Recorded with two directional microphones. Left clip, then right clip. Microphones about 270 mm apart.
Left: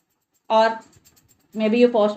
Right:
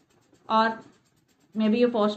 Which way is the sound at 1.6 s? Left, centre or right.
Left.